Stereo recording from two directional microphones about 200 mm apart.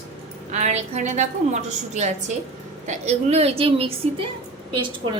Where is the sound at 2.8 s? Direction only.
35° right (ahead or behind).